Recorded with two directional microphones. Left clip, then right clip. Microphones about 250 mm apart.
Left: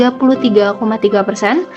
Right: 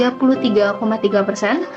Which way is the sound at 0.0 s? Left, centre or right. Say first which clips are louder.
Left 4 dB; left.